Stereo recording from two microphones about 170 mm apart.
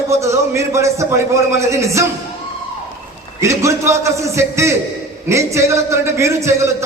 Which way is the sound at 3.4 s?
15° right (ahead or behind).